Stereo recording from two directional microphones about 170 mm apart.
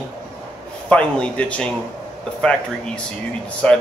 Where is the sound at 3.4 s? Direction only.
5° left (ahead or behind).